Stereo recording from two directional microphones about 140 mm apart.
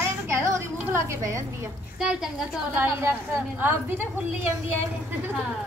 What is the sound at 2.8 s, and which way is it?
A woman's voice, 15° right (ahead or behind).